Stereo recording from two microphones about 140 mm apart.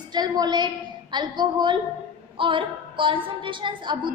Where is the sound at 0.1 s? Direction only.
30° right (ahead or behind).